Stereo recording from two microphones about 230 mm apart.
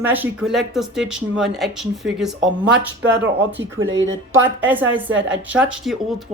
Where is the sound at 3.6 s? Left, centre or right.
Right.